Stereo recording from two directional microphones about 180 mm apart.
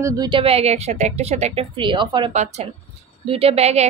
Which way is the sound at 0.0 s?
25° right (ahead or behind).